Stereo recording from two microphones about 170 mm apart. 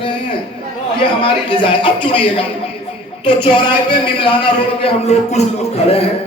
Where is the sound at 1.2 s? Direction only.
30° left (ahead or behind).